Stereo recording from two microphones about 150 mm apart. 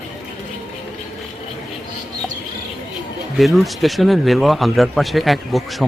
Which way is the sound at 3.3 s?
Centre (ahead or behind).